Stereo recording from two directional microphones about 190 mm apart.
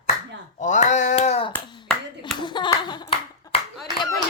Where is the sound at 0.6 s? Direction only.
40° left (ahead or behind).